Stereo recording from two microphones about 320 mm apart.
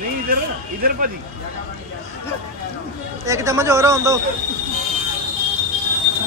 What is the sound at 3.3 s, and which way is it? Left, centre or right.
Speech, centre.